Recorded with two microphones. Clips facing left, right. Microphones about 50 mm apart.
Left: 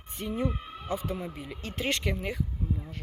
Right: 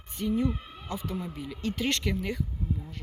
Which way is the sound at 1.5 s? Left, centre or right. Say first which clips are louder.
Right 2 dB; centre.